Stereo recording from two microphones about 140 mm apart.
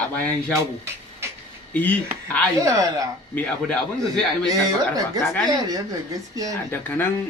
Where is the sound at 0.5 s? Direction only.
20° right (ahead or behind).